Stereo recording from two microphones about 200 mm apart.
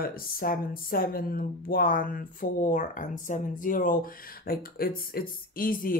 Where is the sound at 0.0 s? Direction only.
45° left (ahead or behind).